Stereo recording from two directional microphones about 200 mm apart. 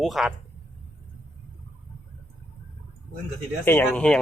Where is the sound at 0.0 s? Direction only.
Centre (ahead or behind).